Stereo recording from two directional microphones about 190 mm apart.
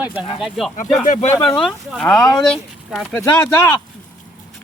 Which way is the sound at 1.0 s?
40° left (ahead or behind).